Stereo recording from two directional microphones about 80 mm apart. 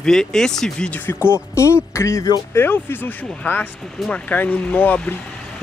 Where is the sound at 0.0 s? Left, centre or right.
Centre.